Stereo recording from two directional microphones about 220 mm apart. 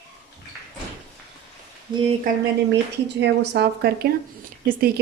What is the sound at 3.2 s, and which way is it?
A woman's voice, 50° right (ahead or behind).